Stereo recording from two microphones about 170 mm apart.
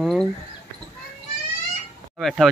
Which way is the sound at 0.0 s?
Centre (ahead or behind).